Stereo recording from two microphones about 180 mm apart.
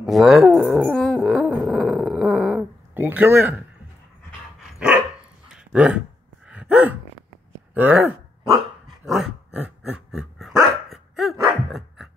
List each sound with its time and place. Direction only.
0.0 s speech: centre (ahead or behind)
2.9 s speech: 10° right (ahead or behind)
5.5 s a sound: 5° right (ahead or behind)
6.5 s gasp: 5° right (ahead or behind)
7.7 s speech: 10° right (ahead or behind)
8.5 s dog: centre (ahead or behind)